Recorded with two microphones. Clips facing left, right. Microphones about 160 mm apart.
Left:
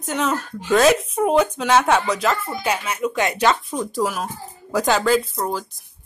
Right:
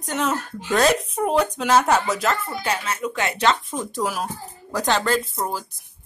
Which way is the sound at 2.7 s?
10° left (ahead or behind).